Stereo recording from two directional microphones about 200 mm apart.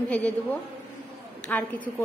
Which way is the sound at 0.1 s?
5° left (ahead or behind).